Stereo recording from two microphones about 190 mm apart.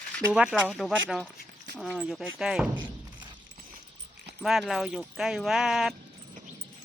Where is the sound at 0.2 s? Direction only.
5° right (ahead or behind).